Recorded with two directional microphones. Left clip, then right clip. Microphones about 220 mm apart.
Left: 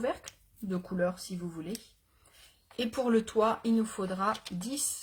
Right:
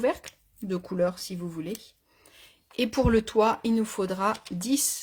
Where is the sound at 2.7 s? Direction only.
45° right (ahead or behind).